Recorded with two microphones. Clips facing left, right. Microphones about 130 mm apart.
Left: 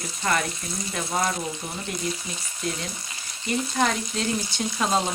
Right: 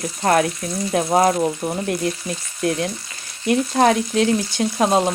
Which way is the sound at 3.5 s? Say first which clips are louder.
Right 8 dB; 65° right (ahead or behind).